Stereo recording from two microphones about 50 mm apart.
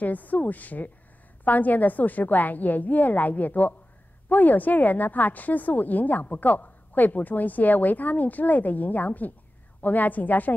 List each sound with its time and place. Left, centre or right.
0.0 s a woman's voice: left